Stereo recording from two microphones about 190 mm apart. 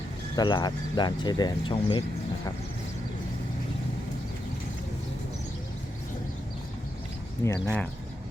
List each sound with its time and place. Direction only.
0.3 s speech: 20° left (ahead or behind)
7.4 s speech: 15° left (ahead or behind)